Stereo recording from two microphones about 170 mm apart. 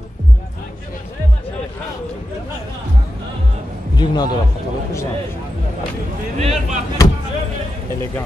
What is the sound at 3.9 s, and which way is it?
Speech, 25° left (ahead or behind).